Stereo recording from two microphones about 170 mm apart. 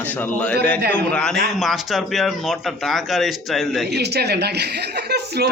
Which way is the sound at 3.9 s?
75° right (ahead or behind).